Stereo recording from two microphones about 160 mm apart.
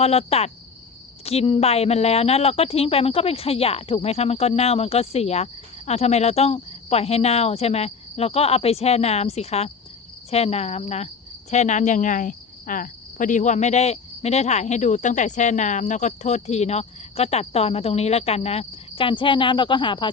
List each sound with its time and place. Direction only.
0.0 s a woman's voice: 40° left (ahead or behind)
11.5 s cricket: 45° left (ahead or behind); by 20.1 s 30° left (ahead or behind)